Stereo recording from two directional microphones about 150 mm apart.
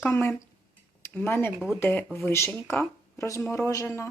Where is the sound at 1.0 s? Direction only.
15° left (ahead or behind).